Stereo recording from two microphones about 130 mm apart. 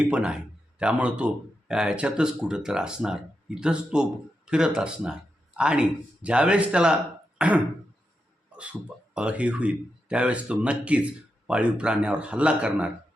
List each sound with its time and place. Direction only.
0.1 s speech: 5° right (ahead or behind)
7.3 s throat clearing: 10° right (ahead or behind)
9.1 s speech: 10° right (ahead or behind)